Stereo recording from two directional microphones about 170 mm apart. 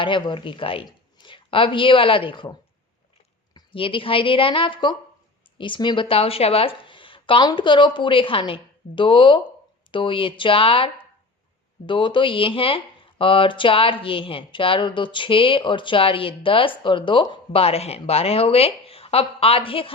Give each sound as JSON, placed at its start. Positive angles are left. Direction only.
{"t": 0.0, "sound": "a woman's voice", "side_deg": 30}